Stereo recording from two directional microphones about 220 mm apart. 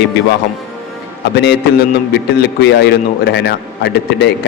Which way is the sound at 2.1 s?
50° left (ahead or behind).